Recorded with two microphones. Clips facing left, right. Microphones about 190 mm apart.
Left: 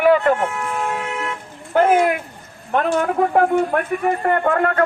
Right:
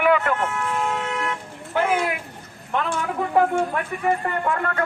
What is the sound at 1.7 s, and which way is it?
A man's voice, 50° left (ahead or behind).